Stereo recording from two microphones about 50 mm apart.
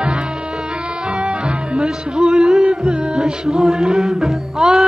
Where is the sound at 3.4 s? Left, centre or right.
Centre.